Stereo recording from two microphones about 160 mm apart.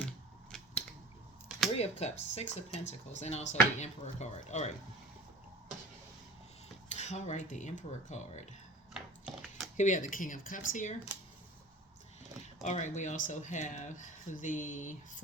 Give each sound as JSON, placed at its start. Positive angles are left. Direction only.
{"t": 0.5, "sound": "scissors", "side_deg": 5}
{"t": 1.7, "sound": "speech", "side_deg": 40}
{"t": 6.9, "sound": "speech", "side_deg": 45}
{"t": 8.9, "sound": "a sound", "side_deg": -5}
{"t": 9.7, "sound": "speech", "side_deg": 50}
{"t": 12.6, "sound": "speech", "side_deg": 45}